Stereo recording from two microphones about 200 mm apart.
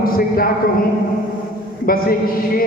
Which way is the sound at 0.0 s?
45° left (ahead or behind).